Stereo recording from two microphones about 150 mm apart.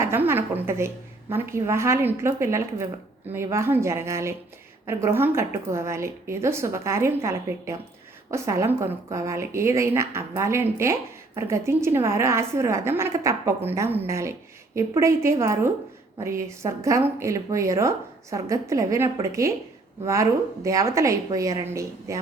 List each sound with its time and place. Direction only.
0.0 s a woman's voice: 15° right (ahead or behind)